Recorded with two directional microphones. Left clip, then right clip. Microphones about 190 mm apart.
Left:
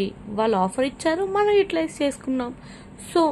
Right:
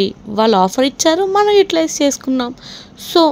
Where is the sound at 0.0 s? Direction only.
40° right (ahead or behind).